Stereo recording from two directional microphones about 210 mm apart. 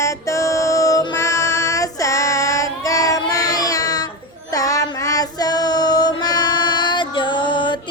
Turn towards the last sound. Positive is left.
turn(degrees=20)  # may be behind; listen again after turning